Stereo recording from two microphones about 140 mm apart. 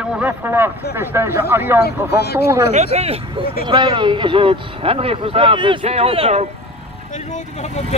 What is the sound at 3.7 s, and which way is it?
Speech, 35° right (ahead or behind).